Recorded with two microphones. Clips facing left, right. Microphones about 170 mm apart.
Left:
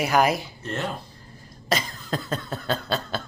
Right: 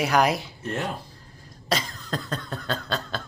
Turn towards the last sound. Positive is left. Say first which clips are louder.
# left 3 dB
turn(degrees=5)  # may be behind; listen again after turning